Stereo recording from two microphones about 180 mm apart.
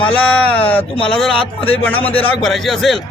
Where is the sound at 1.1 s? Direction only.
5° left (ahead or behind).